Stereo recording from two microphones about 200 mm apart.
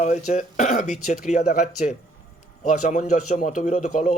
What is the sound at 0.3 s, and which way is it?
A man's voice, 35° left (ahead or behind).